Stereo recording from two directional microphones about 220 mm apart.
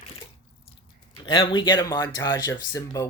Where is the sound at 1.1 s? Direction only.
20° left (ahead or behind).